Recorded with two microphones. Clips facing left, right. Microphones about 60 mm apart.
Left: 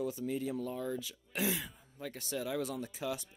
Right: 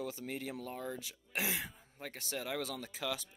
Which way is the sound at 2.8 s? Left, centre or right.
Right.